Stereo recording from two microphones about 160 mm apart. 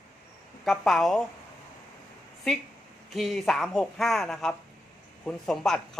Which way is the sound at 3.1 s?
Centre (ahead or behind).